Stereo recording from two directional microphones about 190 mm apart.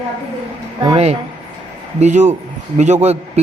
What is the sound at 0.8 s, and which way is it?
A man's voice, 30° right (ahead or behind).